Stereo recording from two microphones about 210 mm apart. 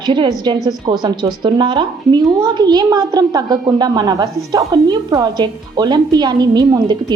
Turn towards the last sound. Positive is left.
turn(degrees=-20)  # may be behind; listen again after turning